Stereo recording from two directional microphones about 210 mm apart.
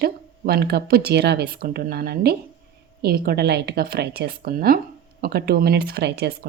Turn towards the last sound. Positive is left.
turn(degrees=-50)  # may be behind; listen again after turning